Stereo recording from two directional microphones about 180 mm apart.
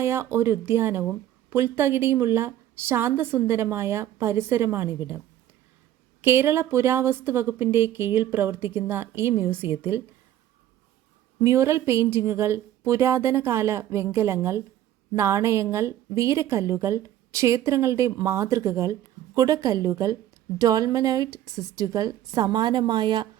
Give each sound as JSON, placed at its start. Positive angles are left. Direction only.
{"t": 0.0, "sound": "a woman's voice", "side_deg": -15}
{"t": 6.2, "sound": "a woman's voice", "side_deg": -15}
{"t": 11.3, "sound": "a woman's voice", "side_deg": -15}
{"t": 21.5, "sound": "a woman's voice", "side_deg": 0}
{"t": 21.8, "sound": "a woman's voice", "side_deg": -20}